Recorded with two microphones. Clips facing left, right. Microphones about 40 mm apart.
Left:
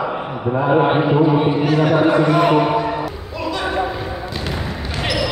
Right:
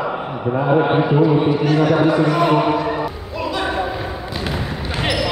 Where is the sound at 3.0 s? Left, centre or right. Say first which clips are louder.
Right 1 dB; centre.